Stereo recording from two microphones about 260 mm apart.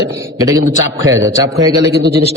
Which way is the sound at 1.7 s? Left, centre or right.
Right.